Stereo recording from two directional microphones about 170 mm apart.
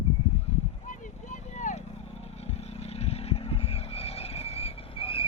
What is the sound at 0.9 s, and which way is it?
Vehicle, 45° left (ahead or behind).